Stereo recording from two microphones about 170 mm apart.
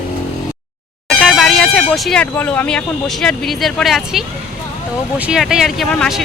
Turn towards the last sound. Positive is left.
turn(degrees=0)  # may be behind; listen again after turning